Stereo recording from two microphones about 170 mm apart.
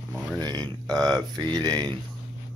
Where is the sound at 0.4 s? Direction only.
25° right (ahead or behind).